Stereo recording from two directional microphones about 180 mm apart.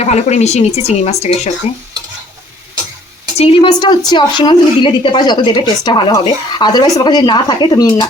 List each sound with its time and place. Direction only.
0.0 s speech: 40° left (ahead or behind)
3.3 s a woman's voice: 35° left (ahead or behind)